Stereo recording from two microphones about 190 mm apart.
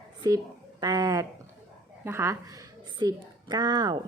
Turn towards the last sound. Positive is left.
turn(degrees=-20)  # may be behind; listen again after turning